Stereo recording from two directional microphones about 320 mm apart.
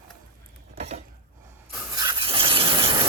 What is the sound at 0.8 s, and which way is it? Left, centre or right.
Dishes, centre.